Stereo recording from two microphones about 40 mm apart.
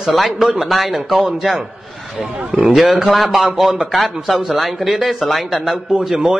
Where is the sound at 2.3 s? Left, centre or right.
Right.